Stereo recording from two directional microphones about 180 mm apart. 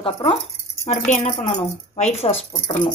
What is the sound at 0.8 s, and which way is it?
Speech, 40° left (ahead or behind).